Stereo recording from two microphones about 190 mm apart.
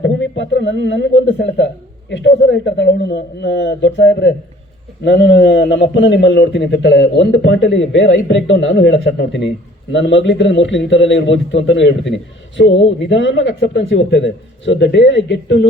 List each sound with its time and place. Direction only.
0.0 s a man's voice: 70° left (ahead or behind)